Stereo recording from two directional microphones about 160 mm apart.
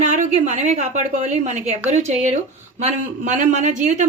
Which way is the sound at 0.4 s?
45° right (ahead or behind).